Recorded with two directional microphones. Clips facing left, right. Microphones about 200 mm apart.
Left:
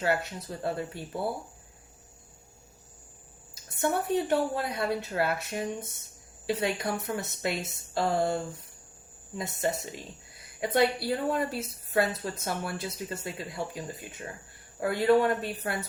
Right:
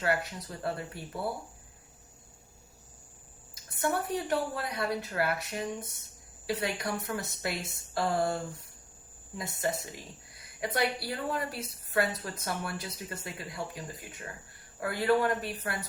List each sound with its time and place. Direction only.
0.0 s speech: 25° left (ahead or behind)
3.8 s speech: 25° left (ahead or behind)
9.4 s speech: 25° left (ahead or behind)